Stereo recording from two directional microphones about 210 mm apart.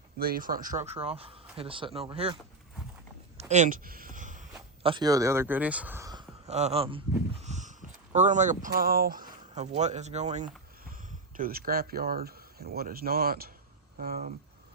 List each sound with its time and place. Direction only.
0.2 s speech: 45° right (ahead or behind); by 2.4 s 25° right (ahead or behind)
3.3 s a sound: 35° right (ahead or behind)
4.8 s speech: 25° right (ahead or behind)
6.5 s speech: 30° right (ahead or behind); by 14.3 s 45° right (ahead or behind)